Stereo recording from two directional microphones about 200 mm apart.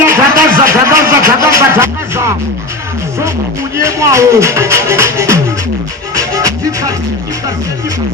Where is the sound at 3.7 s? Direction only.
15° right (ahead or behind).